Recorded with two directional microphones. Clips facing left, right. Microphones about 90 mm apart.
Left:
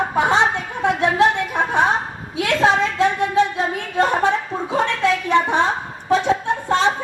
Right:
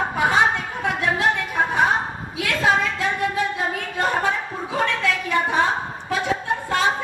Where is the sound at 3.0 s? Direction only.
25° left (ahead or behind).